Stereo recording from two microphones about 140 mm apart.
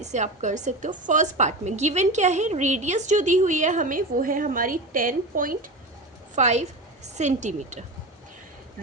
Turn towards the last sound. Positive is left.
turn(degrees=-60)  # may be behind; listen again after turning